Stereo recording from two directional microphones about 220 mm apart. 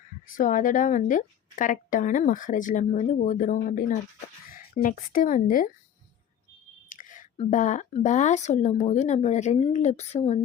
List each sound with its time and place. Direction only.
0.3 s speech: 35° left (ahead or behind)
6.9 s speech: 35° left (ahead or behind)